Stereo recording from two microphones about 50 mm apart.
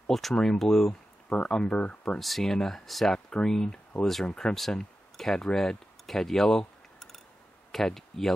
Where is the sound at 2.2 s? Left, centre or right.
Centre.